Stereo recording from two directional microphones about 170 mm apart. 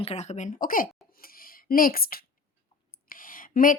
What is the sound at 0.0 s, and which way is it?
Speech, 40° left (ahead or behind).